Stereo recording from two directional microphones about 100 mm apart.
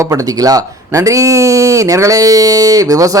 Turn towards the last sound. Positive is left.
turn(degrees=-35)  # may be behind; listen again after turning